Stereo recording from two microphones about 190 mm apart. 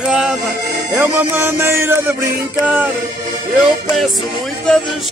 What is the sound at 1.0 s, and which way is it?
Speech, 10° right (ahead or behind).